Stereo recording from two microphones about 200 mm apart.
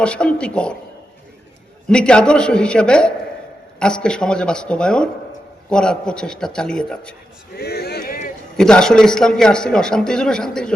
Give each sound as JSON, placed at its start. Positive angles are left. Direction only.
{"t": 0.0, "sound": "a man's voice", "side_deg": 5}
{"t": 1.9, "sound": "a man's voice", "side_deg": 5}
{"t": 7.5, "sound": "a sound", "side_deg": 50}
{"t": 8.5, "sound": "a man's voice", "side_deg": 5}